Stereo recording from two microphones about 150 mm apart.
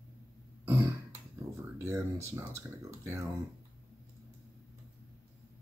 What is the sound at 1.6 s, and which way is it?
Speech, 20° right (ahead or behind).